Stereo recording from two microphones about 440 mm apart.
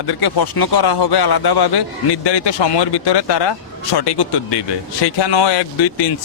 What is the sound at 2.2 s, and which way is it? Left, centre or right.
Speech, left.